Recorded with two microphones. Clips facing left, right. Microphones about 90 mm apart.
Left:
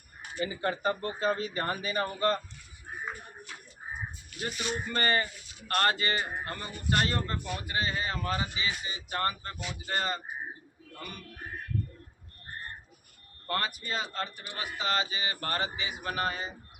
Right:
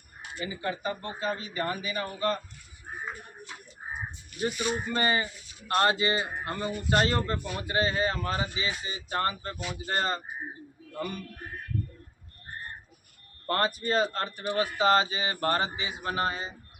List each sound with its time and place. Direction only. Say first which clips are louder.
0.3 s speech: left 2 dB; 45° left (ahead or behind)
4.4 s speech: right 5 dB; 10° right (ahead or behind); by 10.2 s 35° right (ahead or behind)
13.5 s speech: right 6 dB; 35° right (ahead or behind)